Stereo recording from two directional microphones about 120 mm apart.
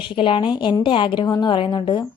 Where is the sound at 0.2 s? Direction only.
45° left (ahead or behind).